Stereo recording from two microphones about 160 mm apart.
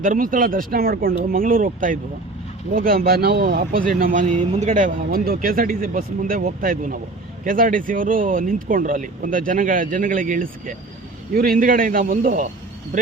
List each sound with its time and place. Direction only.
0.0 s speech: 55° right (ahead or behind)